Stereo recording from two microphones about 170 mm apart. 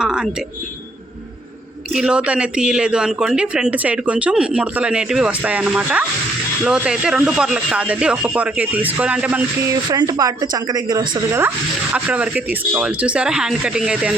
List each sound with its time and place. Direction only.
0.0 s speech: 5° right (ahead or behind)
1.9 s speech: 5° right (ahead or behind)
9.9 s a woman's voice: 20° right (ahead or behind)
11.3 s speech: 15° right (ahead or behind)